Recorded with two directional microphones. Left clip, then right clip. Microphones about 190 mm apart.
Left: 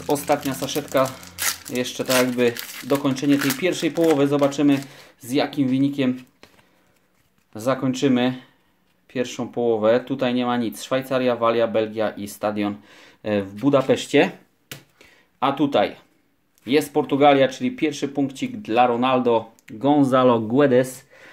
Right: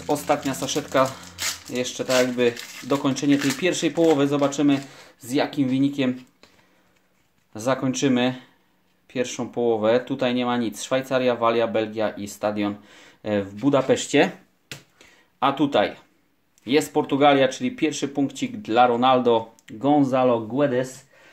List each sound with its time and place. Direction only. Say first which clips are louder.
0.0 s speech: left 1 dB; 10° left (ahead or behind)
1.7 s speech: even; 15° left (ahead or behind)
3.0 s speech: even; centre (ahead or behind)
7.5 s speech: left 1 dB; 5° left (ahead or behind)
19.6 s speech: left 1 dB; 10° left (ahead or behind)
20.5 s speech: left 5 dB; 40° left (ahead or behind)